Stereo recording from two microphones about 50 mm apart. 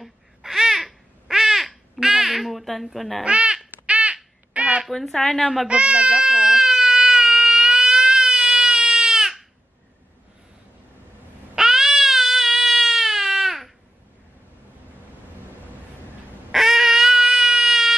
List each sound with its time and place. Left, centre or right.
0.0 s babbling: centre
3.3 s a child's voice: right
3.8 s crow: right
4.8 s speech: centre
5.2 s speech: centre
5.7 s a child's voice: right
6.1 s baby cry: centre
11.5 s baby cry: centre
16.5 s a sound: centre